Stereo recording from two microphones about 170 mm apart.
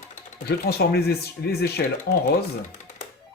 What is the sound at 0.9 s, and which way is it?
Speech, 70° left (ahead or behind).